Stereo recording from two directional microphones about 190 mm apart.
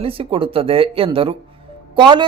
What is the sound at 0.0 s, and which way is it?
Speech, 30° right (ahead or behind).